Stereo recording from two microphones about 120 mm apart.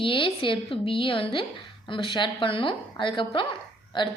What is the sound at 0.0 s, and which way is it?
A woman's voice, 45° left (ahead or behind).